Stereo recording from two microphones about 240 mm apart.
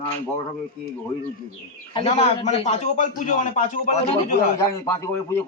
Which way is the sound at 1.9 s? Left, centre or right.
Left.